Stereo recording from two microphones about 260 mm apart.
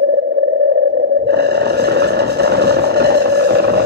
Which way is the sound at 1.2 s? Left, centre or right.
Right.